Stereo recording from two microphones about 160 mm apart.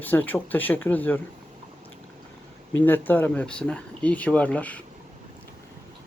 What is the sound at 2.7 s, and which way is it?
Speech, 10° left (ahead or behind).